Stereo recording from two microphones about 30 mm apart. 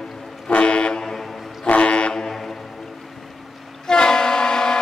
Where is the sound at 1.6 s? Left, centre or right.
Left.